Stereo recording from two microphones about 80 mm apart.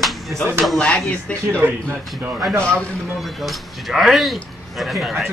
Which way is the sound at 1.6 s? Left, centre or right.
Right.